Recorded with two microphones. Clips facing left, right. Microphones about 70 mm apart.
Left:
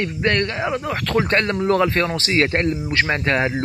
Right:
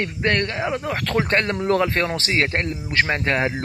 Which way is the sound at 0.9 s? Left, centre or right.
Centre.